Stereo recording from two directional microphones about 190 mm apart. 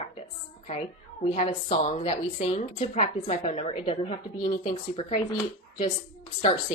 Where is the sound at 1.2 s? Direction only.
30° left (ahead or behind).